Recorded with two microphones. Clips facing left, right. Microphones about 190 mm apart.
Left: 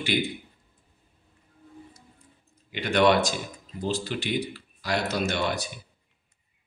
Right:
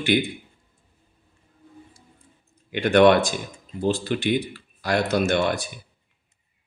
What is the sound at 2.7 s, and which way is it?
Speech, 55° right (ahead or behind).